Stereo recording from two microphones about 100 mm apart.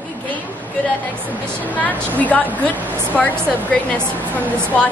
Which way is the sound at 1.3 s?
15° right (ahead or behind).